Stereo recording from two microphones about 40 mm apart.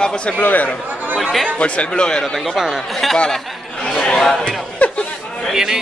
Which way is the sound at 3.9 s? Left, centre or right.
Left.